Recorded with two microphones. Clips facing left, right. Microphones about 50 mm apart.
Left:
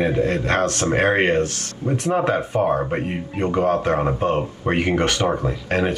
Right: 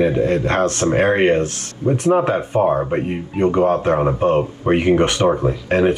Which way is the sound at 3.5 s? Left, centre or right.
Right.